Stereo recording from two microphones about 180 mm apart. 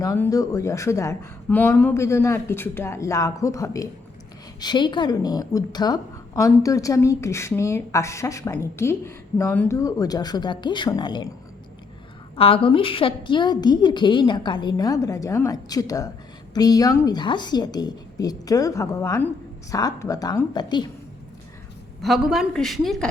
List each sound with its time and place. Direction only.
0.0 s a woman's voice: 20° left (ahead or behind)
12.4 s a woman's voice: 30° left (ahead or behind)
22.0 s a woman's voice: centre (ahead or behind)